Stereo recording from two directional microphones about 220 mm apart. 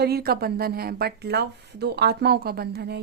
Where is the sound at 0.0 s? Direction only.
45° right (ahead or behind).